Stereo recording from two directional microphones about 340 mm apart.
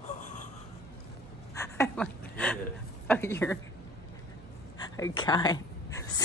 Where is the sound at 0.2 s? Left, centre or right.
Left.